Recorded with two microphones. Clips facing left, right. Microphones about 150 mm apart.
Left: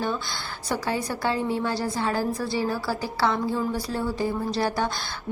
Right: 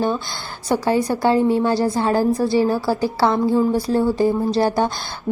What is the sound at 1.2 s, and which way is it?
A woman's voice, 30° right (ahead or behind).